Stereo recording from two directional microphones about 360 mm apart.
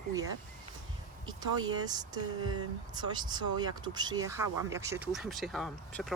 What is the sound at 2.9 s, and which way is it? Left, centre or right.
Speech, centre.